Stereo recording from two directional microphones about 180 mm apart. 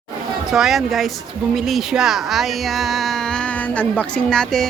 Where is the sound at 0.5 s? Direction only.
Centre (ahead or behind).